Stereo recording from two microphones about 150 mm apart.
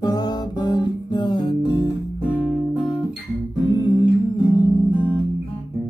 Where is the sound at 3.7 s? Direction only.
30° left (ahead or behind).